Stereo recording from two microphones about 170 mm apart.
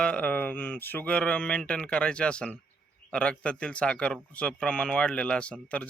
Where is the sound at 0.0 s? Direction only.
5° left (ahead or behind).